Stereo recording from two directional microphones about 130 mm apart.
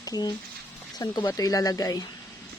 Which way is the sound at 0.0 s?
30° left (ahead or behind).